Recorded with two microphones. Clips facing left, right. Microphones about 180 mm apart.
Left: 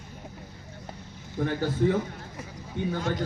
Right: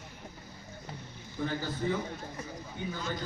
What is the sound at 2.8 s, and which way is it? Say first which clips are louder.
Speech: left 7 dB; 75° left (ahead or behind).